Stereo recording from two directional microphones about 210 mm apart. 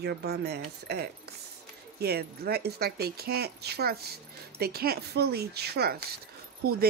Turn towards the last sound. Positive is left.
turn(degrees=-45)  # may be behind; listen again after turning